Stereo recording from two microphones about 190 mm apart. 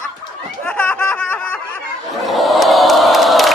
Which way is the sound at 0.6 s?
10° left (ahead or behind).